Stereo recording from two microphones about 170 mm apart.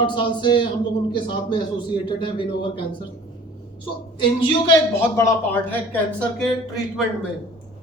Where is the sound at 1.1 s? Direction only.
25° left (ahead or behind).